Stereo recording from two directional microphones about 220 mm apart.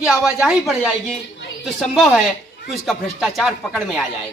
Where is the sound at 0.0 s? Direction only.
Centre (ahead or behind).